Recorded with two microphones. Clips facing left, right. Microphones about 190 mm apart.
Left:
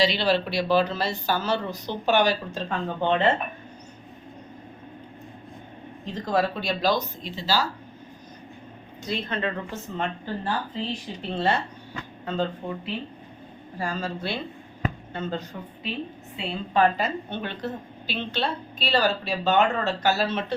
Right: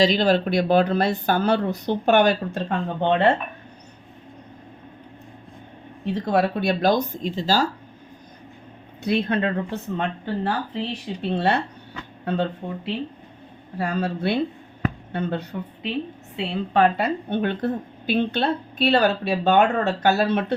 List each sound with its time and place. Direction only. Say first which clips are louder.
0.0 s a woman's voice: right 4 dB; 45° right (ahead or behind); by 3.3 s 65° right (ahead or behind)
6.1 s speech: right 4 dB; 60° right (ahead or behind); by 7.7 s 45° right (ahead or behind)
9.0 s a woman's voice: right 7 dB; 60° right (ahead or behind)